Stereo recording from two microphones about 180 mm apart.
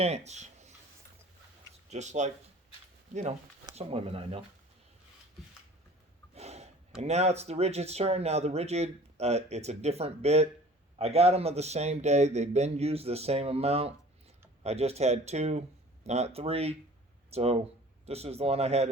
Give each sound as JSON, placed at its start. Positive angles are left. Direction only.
{"t": 0.0, "sound": "speech", "side_deg": -40}
{"t": 1.9, "sound": "speech", "side_deg": -40}
{"t": 6.3, "sound": "a sound", "side_deg": -35}
{"t": 7.0, "sound": "speech", "side_deg": -35}